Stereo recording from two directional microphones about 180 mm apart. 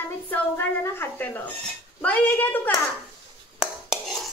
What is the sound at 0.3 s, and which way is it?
A woman's voice, 10° left (ahead or behind).